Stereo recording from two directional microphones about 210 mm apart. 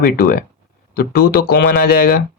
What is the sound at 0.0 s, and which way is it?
Speech, 45° left (ahead or behind).